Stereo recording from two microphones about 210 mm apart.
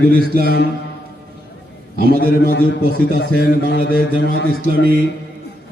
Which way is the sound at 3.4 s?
55° left (ahead or behind).